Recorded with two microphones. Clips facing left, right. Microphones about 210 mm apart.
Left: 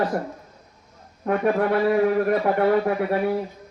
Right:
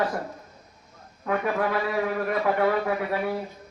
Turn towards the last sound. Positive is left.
turn(degrees=35)  # may be behind; listen again after turning